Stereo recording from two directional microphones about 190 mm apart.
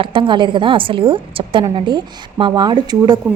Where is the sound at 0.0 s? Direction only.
25° right (ahead or behind).